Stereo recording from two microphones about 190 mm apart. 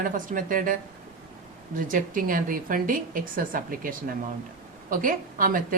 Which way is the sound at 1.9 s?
45° right (ahead or behind).